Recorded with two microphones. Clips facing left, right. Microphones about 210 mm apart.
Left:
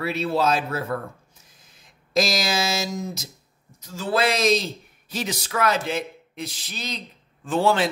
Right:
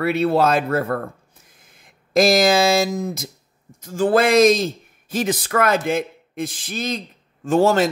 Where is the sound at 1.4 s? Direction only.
55° right (ahead or behind).